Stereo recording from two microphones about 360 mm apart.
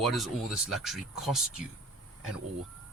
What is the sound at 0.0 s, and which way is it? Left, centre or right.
Speech, centre.